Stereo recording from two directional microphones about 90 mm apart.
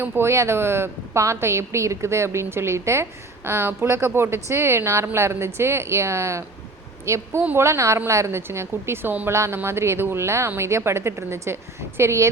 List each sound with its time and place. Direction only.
0.0 s a woman's voice: 30° right (ahead or behind)